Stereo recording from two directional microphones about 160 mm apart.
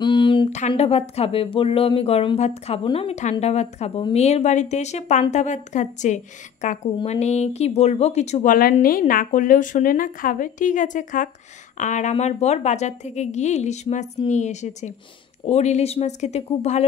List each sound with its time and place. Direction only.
0.0 s a sound: 30° left (ahead or behind)
0.5 s a woman's voice: 45° left (ahead or behind)
8.8 s a woman's voice: 60° left (ahead or behind); by 16.8 s 45° left (ahead or behind)